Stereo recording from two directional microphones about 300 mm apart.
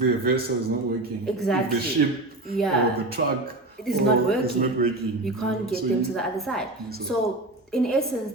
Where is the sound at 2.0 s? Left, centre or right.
Right.